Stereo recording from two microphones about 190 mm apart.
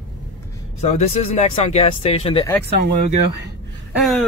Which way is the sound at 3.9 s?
Centre (ahead or behind).